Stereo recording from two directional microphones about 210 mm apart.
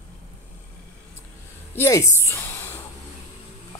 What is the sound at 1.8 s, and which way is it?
Speech, 15° left (ahead or behind).